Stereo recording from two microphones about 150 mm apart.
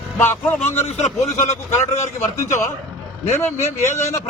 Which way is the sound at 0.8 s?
45° left (ahead or behind).